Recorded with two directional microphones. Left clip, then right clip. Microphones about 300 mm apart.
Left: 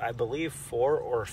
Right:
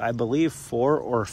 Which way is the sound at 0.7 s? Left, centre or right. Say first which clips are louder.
Right 2 dB; right.